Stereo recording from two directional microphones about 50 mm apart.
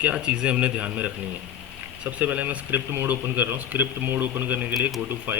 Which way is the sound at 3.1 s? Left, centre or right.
Right.